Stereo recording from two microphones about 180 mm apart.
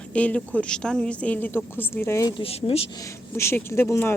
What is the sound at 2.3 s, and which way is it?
Speech, 30° left (ahead or behind).